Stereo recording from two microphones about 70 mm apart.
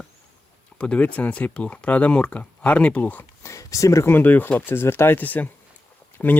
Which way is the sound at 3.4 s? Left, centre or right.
Left.